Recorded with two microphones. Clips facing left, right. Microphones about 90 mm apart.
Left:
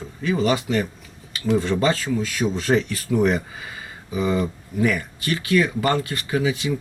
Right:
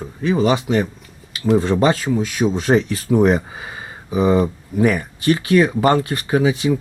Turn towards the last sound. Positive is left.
turn(degrees=-30)  # may be behind; listen again after turning